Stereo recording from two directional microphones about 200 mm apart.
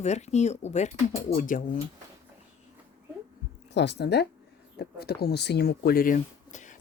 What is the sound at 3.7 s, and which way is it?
Speech, 60° left (ahead or behind).